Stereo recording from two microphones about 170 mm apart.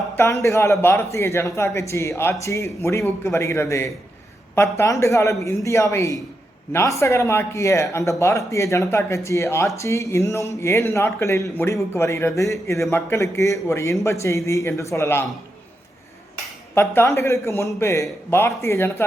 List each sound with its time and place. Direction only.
0.2 s speech: 15° left (ahead or behind)
16.7 s speech: 15° left (ahead or behind)